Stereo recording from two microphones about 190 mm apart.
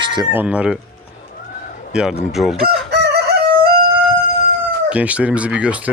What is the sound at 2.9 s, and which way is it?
Crowing, 60° right (ahead or behind).